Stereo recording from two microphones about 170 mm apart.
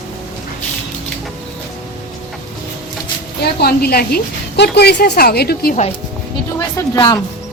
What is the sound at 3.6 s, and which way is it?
A woman's voice, 65° left (ahead or behind).